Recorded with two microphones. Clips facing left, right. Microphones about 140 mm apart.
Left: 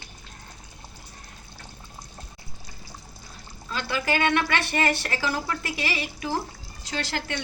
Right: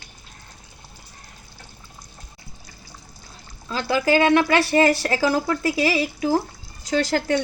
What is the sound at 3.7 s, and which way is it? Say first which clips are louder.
A woman's voice: right 8 dB; 35° right (ahead or behind).